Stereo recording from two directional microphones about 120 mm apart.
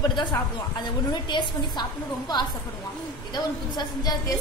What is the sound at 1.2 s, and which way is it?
A woman's voice, 40° left (ahead or behind).